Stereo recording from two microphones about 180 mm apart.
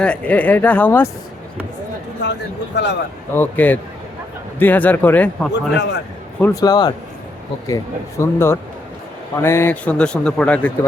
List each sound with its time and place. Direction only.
0.0 s speech: 5° left (ahead or behind)
2.2 s a man's voice: 75° left (ahead or behind)
3.3 s speech: 10° left (ahead or behind)
5.7 s a man's voice: 70° left (ahead or behind)
6.4 s speech: 20° left (ahead or behind)
8.2 s speech: 15° left (ahead or behind)